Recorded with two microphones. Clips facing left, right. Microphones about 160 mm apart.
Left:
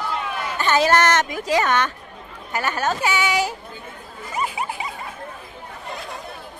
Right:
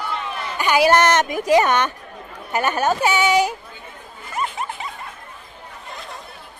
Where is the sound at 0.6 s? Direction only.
15° right (ahead or behind).